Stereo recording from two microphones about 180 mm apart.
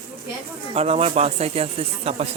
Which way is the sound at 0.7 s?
35° right (ahead or behind).